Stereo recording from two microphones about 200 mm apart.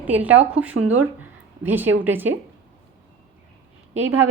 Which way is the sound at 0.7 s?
85° right.